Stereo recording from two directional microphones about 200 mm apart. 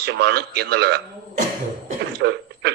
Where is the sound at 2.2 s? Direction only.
55° right (ahead or behind).